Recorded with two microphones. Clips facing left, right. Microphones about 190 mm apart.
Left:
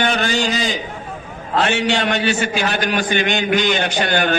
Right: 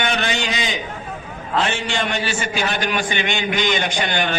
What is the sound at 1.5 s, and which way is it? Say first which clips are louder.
Speech: left 3 dB; 60° left (ahead or behind).